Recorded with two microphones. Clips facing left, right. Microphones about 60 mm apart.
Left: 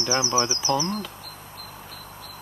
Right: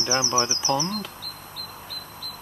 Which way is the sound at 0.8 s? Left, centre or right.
Left.